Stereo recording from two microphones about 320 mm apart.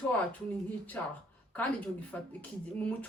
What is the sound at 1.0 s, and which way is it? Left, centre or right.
Speech, centre.